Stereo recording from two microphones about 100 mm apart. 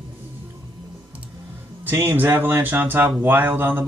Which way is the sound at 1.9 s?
20° right (ahead or behind).